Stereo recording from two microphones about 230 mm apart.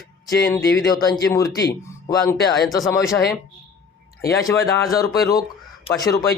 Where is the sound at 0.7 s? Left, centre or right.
Centre.